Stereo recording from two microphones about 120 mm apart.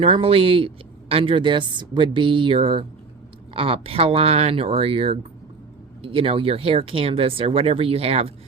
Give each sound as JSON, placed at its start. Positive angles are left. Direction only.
{"t": 0.0, "sound": "speech", "side_deg": -50}